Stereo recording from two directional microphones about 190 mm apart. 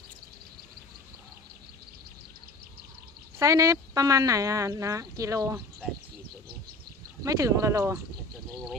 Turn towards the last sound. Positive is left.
turn(degrees=-15)  # may be behind; listen again after turning